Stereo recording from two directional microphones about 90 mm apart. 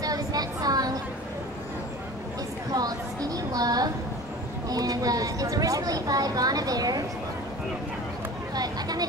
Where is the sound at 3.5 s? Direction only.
45° right (ahead or behind).